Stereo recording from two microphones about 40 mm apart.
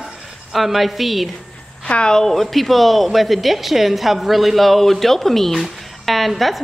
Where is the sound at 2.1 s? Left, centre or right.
Centre.